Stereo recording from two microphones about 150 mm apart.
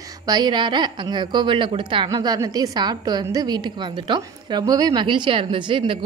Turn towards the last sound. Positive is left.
turn(degrees=-35)  # may be behind; listen again after turning